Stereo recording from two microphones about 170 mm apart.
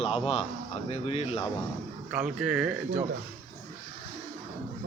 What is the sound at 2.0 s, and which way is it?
Speech, 5° right (ahead or behind).